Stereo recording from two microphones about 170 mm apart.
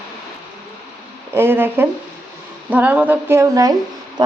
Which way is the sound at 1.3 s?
15° right (ahead or behind).